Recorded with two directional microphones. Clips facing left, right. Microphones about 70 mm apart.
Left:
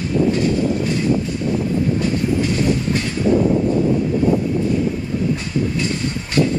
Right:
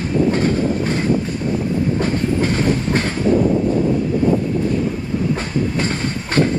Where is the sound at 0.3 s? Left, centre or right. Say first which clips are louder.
Even; right.